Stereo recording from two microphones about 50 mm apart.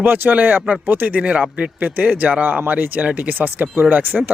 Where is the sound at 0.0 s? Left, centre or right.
Right.